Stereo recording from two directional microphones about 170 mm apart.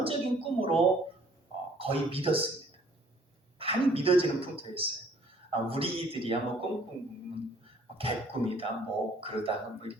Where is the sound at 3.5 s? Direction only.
35° right (ahead or behind).